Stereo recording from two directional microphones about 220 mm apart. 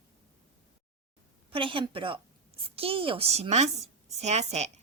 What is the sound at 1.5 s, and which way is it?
A woman's voice, 25° right (ahead or behind).